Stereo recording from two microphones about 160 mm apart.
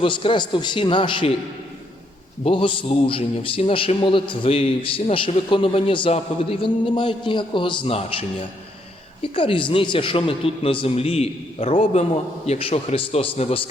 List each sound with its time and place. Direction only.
0.0 s a man's voice: 35° left (ahead or behind)
2.4 s a man's voice: 35° left (ahead or behind)